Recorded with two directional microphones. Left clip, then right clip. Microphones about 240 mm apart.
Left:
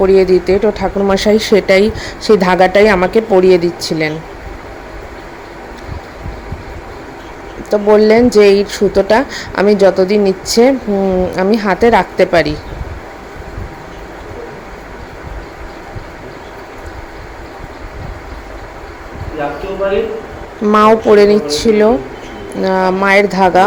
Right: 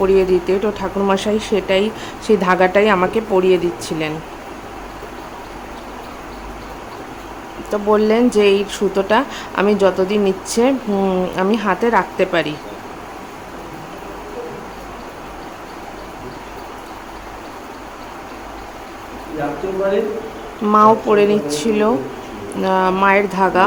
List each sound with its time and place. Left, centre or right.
0.0 s speech: centre
7.7 s speech: centre
20.7 s speech: centre